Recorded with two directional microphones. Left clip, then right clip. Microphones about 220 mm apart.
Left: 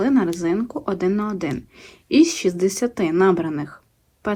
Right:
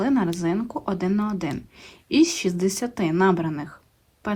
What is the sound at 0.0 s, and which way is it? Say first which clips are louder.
Speech: left 3 dB; 5° right (ahead or behind).